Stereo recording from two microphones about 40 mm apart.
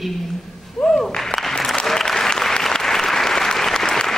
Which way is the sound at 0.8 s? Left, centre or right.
Centre.